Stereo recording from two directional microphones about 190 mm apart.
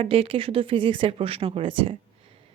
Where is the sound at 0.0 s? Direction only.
30° right (ahead or behind).